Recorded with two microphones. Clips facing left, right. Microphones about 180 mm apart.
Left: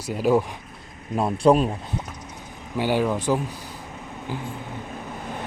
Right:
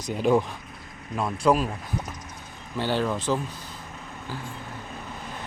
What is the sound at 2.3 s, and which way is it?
Vehicle, 10° left (ahead or behind).